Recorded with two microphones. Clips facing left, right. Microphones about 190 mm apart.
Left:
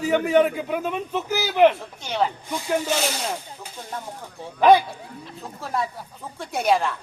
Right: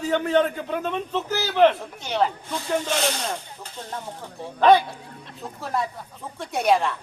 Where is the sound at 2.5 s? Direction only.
10° left (ahead or behind).